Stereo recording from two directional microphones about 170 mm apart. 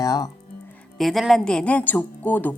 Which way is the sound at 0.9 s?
Centre (ahead or behind).